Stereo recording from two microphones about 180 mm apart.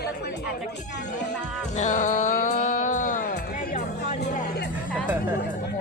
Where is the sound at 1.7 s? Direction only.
40° left (ahead or behind).